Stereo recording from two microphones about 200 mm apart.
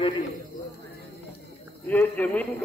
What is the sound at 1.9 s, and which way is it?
Speech, 10° left (ahead or behind).